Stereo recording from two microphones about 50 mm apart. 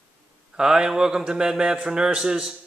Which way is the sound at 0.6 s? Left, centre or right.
Centre.